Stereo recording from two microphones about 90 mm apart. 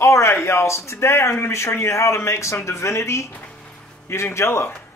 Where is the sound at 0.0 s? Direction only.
30° left (ahead or behind).